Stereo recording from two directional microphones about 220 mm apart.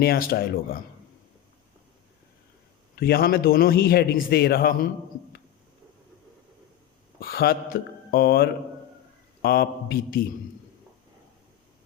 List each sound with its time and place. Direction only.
0.0 s a man's voice: 45° left (ahead or behind)
2.9 s a man's voice: 45° left (ahead or behind)
7.2 s a man's voice: 45° left (ahead or behind)